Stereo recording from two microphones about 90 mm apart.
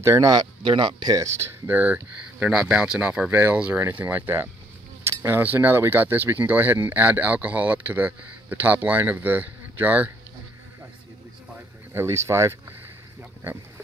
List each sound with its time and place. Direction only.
0.0 s speech: 30° right (ahead or behind)
0.3 s speech: 60° right (ahead or behind)
1.1 s speech: 35° right (ahead or behind)
1.7 s speech: 20° right (ahead or behind)
11.9 s speech: 30° right (ahead or behind)